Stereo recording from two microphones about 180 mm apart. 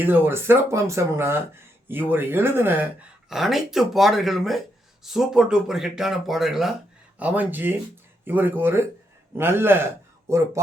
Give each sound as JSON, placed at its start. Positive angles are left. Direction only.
{"t": 0.0, "sound": "a man's voice", "side_deg": -10}